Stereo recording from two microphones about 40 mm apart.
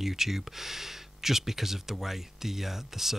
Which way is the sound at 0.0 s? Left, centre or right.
Centre.